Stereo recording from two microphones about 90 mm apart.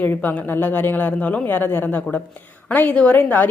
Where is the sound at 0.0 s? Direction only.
20° left (ahead or behind).